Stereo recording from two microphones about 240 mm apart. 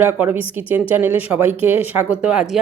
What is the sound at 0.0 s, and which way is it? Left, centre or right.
Speech, centre.